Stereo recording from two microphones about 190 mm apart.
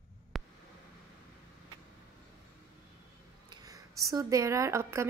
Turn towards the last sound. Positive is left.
turn(degrees=-15)  # may be behind; listen again after turning